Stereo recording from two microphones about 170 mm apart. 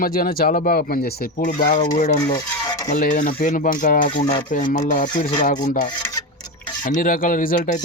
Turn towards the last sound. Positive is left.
turn(degrees=50)  # may be behind; listen again after turning